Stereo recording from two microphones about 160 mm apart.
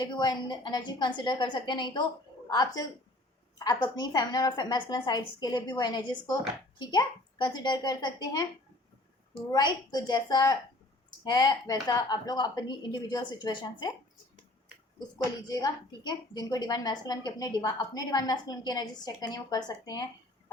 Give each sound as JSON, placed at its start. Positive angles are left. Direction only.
{"t": 0.0, "sound": "a woman's voice", "side_deg": 25}
{"t": 9.5, "sound": "a woman's voice", "side_deg": 25}
{"t": 15.4, "sound": "a woman's voice", "side_deg": 25}